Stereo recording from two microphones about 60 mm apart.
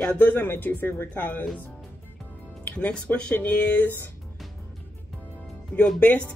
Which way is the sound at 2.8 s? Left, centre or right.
Left.